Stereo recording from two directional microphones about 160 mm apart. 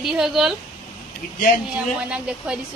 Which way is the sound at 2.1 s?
5° right (ahead or behind).